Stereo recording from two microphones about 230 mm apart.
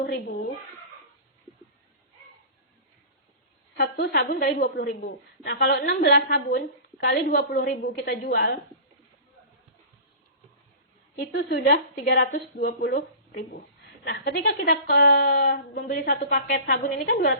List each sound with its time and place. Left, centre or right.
0.0 s a woman's voice: left
3.8 s a woman's voice: left
11.2 s a woman's voice: left